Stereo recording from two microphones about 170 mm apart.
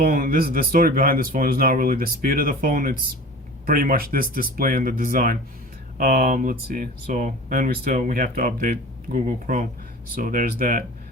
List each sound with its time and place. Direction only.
0.0 s speech: 60° right (ahead or behind)